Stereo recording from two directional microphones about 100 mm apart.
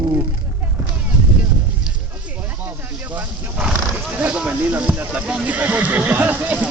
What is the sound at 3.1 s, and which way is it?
Vehicle, 15° right (ahead or behind).